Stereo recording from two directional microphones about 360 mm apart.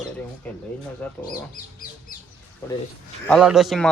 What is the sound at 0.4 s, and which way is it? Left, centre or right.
Speech, centre.